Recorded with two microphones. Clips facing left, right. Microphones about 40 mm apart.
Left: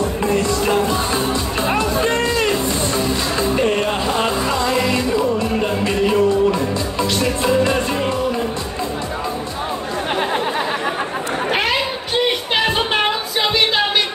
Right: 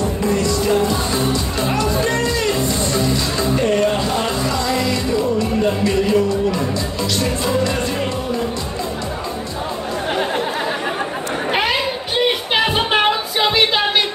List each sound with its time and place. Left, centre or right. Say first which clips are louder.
0.2 s music: even; left
3.3 s music: even; left
11.5 s music: right 1 dB; centre